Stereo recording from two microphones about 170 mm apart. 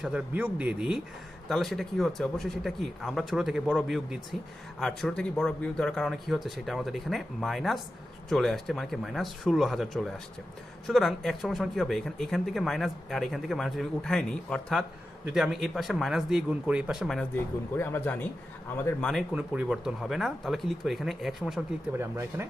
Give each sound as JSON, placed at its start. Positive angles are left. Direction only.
{"t": 0.0, "sound": "speech", "side_deg": -10}
{"t": 17.3, "sound": "speech", "side_deg": 15}
{"t": 19.3, "sound": "speech", "side_deg": -5}
{"t": 21.9, "sound": "speech", "side_deg": -15}